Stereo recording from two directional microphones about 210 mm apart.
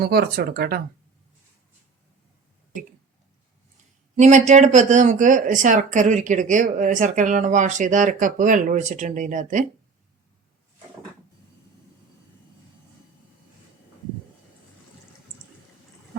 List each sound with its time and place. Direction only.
0.0 s speech: 50° right (ahead or behind)
4.2 s speech: 35° right (ahead or behind)